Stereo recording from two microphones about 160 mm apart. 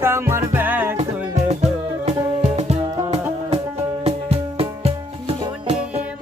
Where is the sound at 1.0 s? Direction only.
45° right (ahead or behind).